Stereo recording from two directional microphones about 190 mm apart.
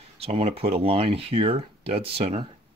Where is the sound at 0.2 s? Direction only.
30° right (ahead or behind).